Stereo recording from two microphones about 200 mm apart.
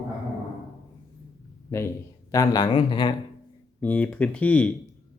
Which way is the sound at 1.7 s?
15° left (ahead or behind).